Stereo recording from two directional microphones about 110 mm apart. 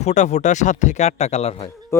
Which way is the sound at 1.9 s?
25° left (ahead or behind).